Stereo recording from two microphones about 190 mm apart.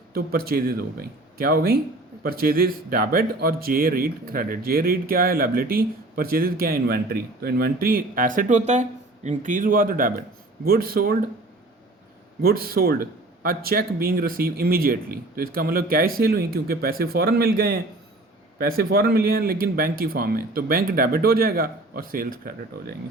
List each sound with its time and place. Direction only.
0.1 s a man's voice: 50° right (ahead or behind)
12.4 s a man's voice: 50° right (ahead or behind)